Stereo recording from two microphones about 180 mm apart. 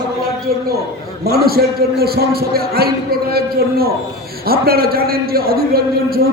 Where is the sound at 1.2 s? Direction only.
60° right (ahead or behind).